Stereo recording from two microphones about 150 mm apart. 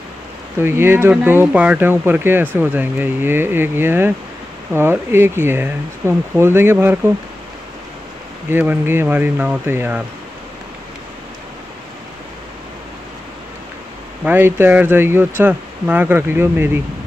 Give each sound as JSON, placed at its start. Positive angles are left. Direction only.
{"t": 0.6, "sound": "speech", "side_deg": -15}
{"t": 8.5, "sound": "speech", "side_deg": -15}
{"t": 14.2, "sound": "speech", "side_deg": -15}